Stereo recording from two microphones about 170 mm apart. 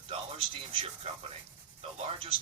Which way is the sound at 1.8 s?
35° right (ahead or behind).